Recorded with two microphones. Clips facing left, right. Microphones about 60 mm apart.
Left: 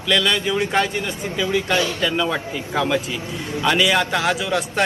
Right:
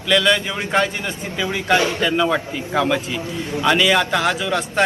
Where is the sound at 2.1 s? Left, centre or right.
Centre.